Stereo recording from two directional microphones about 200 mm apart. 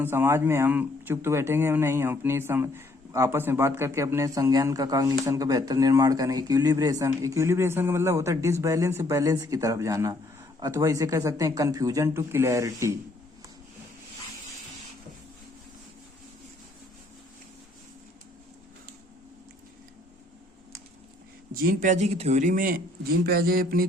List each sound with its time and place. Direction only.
0.0 s speech: 10° right (ahead or behind)
21.5 s speech: 45° right (ahead or behind)